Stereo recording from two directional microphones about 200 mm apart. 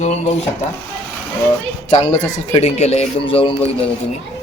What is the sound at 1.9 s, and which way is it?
A man's voice, 35° left (ahead or behind).